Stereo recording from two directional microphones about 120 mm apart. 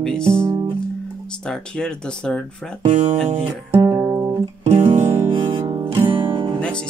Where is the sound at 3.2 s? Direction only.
60° right (ahead or behind).